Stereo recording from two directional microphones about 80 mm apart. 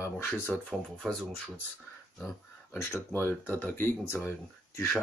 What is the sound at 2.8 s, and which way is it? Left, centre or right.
Speech, left.